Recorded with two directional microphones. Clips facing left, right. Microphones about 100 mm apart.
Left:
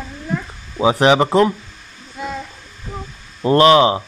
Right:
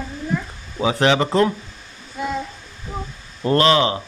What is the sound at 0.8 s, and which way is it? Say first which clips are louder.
Speech: left 4 dB; 20° left (ahead or behind).